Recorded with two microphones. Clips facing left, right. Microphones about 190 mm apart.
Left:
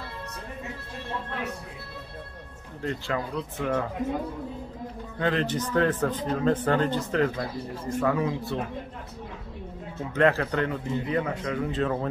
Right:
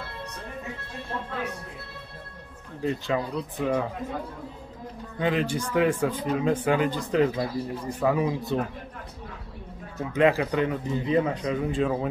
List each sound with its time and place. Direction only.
2.8 s speech: 15° right (ahead or behind)
5.2 s speech: 10° right (ahead or behind)
10.1 s speech: 15° right (ahead or behind)